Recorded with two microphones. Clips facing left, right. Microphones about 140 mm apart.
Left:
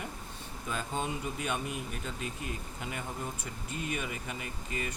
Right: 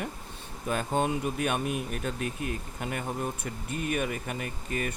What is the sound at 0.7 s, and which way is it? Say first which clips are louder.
Speech: right 7 dB; 60° right (ahead or behind).